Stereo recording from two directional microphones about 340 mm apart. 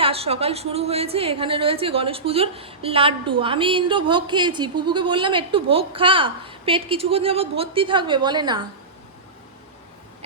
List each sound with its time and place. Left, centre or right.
0.0 s a woman's voice: centre